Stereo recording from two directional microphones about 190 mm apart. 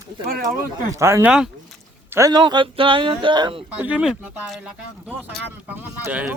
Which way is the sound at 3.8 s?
5° right (ahead or behind).